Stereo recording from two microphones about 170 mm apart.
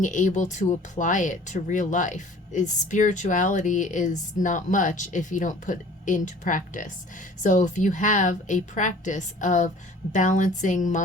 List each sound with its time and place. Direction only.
0.0 s speech: 45° left (ahead or behind)